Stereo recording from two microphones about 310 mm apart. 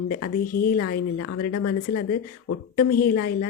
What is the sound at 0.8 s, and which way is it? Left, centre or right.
Speech, left.